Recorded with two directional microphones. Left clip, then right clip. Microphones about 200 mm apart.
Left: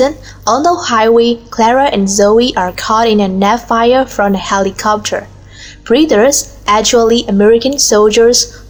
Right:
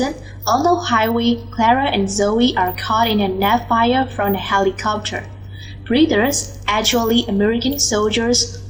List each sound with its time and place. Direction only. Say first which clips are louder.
0.0 s a woman's voice: left 9 dB; 50° left (ahead or behind)